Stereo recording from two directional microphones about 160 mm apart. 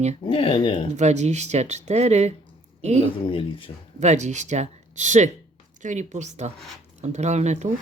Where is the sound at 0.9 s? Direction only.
45° right (ahead or behind).